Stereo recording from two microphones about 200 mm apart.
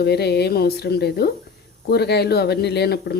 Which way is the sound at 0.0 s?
55° left (ahead or behind).